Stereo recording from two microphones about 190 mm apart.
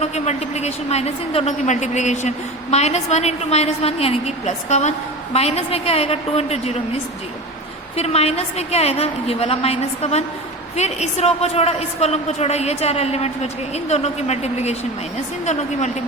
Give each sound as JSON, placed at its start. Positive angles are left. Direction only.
{"t": 0.0, "sound": "a woman's voice", "side_deg": 35}
{"t": 7.9, "sound": "a woman's voice", "side_deg": 35}